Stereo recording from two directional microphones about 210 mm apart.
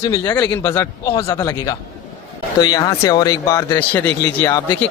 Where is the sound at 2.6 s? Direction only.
20° left (ahead or behind).